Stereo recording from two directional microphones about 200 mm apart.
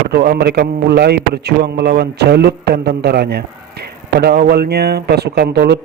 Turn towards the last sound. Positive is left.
turn(degrees=-55)  # may be behind; listen again after turning